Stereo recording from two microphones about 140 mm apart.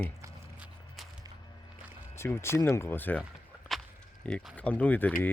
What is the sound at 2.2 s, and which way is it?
Speech, 20° left (ahead or behind).